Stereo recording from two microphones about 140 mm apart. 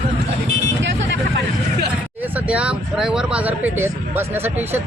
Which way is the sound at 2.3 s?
10° right (ahead or behind).